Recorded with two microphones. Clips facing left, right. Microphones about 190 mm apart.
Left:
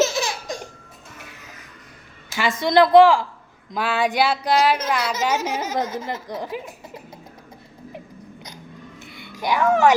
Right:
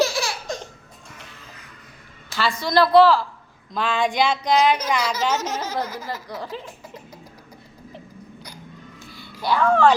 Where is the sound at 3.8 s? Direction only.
5° left (ahead or behind).